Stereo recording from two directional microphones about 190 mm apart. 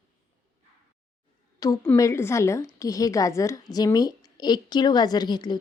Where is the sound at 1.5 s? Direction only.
20° left (ahead or behind).